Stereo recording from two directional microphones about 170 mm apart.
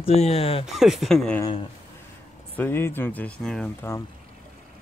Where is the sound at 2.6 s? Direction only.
15° left (ahead or behind).